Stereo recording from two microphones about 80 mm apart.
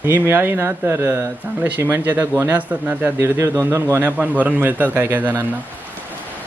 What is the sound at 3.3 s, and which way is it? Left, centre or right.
Speech, right.